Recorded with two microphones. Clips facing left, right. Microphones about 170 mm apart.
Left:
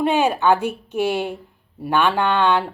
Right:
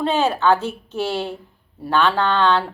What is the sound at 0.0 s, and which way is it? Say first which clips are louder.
Speech: left 1 dB; 15° left (ahead or behind).